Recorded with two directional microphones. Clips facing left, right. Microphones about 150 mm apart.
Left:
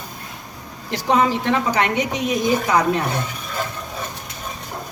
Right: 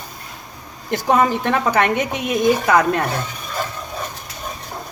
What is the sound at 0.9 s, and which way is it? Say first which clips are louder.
A woman's voice: right 1 dB; 50° right (ahead or behind).